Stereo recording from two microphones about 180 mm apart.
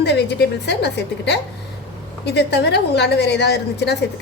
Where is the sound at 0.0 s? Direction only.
70° left (ahead or behind).